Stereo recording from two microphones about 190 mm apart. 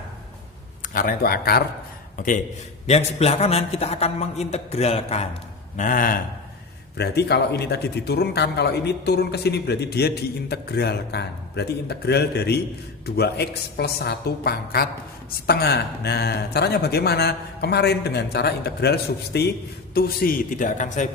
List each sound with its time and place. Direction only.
0.8 s a man's voice: 50° left (ahead or behind)
6.9 s a man's voice: 60° left (ahead or behind); by 21.1 s 40° left (ahead or behind)